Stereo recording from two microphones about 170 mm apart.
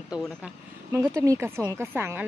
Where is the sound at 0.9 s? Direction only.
15° right (ahead or behind).